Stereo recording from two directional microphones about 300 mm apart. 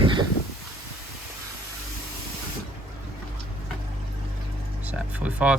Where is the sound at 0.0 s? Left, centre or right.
Centre.